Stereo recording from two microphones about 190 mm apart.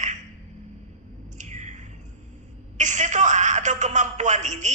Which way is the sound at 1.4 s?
40° right (ahead or behind).